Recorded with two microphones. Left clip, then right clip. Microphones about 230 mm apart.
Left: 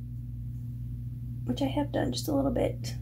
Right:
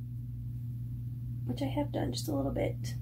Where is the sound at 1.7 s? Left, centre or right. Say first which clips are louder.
Left 4 dB; left.